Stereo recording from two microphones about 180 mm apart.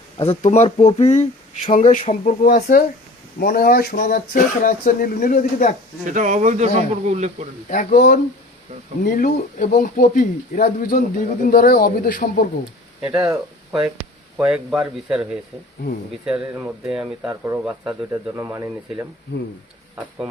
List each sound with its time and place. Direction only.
0.2 s speech: 35° left (ahead or behind)
6.1 s a man's voice: 45° right (ahead or behind)
7.7 s speech: 45° left (ahead or behind)
13.0 s speech: 5° right (ahead or behind)
14.3 s speech: 5° right (ahead or behind)